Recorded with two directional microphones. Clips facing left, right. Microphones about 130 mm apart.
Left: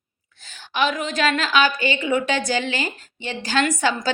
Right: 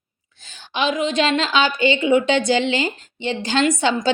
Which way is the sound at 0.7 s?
20° right (ahead or behind).